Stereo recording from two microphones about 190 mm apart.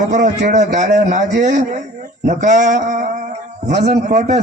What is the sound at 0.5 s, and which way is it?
A man's voice, 40° right (ahead or behind).